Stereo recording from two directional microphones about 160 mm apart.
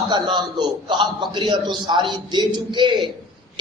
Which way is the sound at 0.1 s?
30° right (ahead or behind).